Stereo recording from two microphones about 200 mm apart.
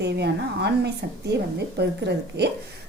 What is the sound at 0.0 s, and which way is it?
A woman's voice, 55° right (ahead or behind).